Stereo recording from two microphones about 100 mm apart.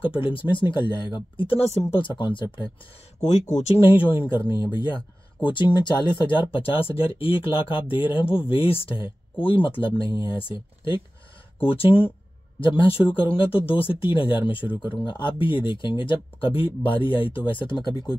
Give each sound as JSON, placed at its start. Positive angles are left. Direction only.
{"t": 0.0, "sound": "speech", "side_deg": 65}
{"t": 3.6, "sound": "speech", "side_deg": 75}
{"t": 4.3, "sound": "speech", "side_deg": 50}